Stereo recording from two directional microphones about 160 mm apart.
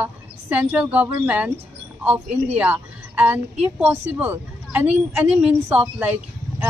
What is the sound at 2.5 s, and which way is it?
Speech, 10° right (ahead or behind).